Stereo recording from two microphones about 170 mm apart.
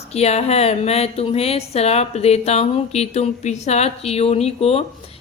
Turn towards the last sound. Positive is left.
turn(degrees=35)  # may be behind; listen again after turning